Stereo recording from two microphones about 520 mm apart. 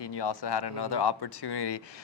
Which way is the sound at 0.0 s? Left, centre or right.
Left.